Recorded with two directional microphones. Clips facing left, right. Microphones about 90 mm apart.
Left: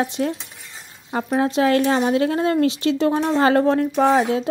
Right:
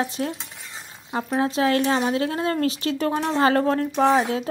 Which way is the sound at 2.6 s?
40° right (ahead or behind).